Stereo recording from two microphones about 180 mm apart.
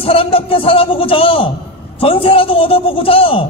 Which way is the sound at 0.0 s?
30° left (ahead or behind).